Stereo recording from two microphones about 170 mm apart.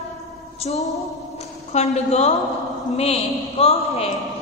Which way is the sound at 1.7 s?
40° left (ahead or behind).